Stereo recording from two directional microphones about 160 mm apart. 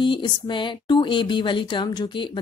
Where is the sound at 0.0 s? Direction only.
30° left (ahead or behind).